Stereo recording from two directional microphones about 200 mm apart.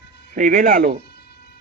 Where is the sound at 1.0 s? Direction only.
55° left (ahead or behind).